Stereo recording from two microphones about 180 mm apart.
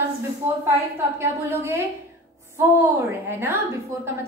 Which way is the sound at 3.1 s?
15° right (ahead or behind).